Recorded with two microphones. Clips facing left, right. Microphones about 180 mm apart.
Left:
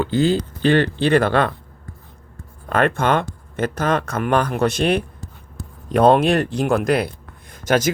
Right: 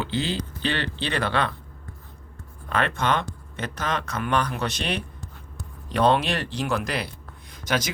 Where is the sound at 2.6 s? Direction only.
50° left (ahead or behind).